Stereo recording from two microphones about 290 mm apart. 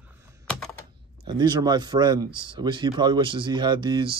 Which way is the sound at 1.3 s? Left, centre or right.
Centre.